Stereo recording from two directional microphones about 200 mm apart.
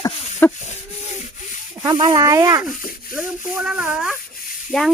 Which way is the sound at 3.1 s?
5° right (ahead or behind).